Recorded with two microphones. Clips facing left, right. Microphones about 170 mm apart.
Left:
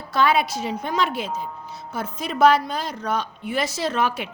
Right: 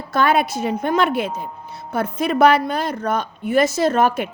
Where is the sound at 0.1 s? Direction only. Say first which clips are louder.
Right 2 dB; 50° right (ahead or behind).